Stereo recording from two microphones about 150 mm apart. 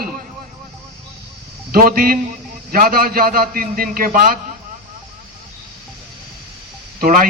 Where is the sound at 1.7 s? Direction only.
75° right (ahead or behind).